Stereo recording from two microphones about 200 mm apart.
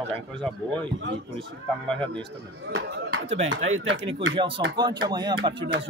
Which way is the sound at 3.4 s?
80° right.